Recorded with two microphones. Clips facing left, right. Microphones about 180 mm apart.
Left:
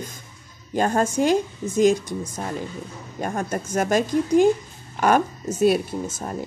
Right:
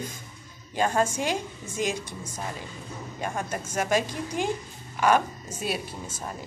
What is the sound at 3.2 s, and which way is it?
A woman's voice, 45° left (ahead or behind).